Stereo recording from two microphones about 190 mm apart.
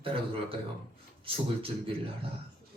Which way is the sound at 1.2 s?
30° right (ahead or behind).